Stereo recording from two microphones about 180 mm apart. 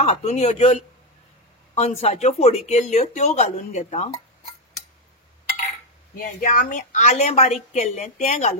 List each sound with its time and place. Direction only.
0.0 s speech: 35° left (ahead or behind)
6.1 s speech: 45° left (ahead or behind)